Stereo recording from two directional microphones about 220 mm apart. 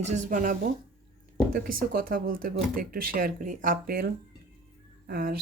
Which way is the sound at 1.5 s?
40° right (ahead or behind).